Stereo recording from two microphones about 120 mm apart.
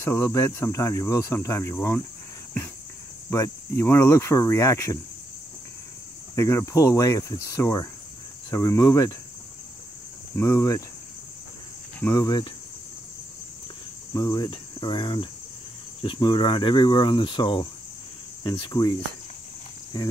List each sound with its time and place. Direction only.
0.0 s cricket: 25° left (ahead or behind)
3.3 s cricket: 25° left (ahead or behind)
6.3 s cricket: 25° left (ahead or behind)
10.3 s cricket: 25° left (ahead or behind)
12.1 s speech: 35° left (ahead or behind)
14.1 s speech: 30° left (ahead or behind)